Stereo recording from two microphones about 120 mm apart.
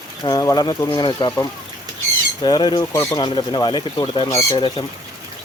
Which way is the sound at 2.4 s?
40° left (ahead or behind).